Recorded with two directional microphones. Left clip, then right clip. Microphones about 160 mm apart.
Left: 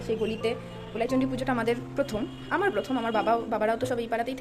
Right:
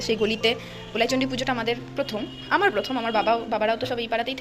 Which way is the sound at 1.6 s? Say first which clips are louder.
Right 1 dB; 20° left (ahead or behind).